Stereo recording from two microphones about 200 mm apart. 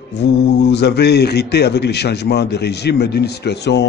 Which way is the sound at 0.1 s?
60° left (ahead or behind).